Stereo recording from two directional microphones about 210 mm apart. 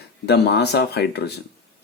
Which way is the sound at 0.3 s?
50° left (ahead or behind).